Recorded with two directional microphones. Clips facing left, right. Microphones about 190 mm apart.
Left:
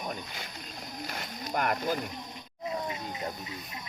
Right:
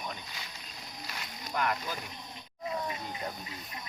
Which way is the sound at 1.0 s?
50° left (ahead or behind).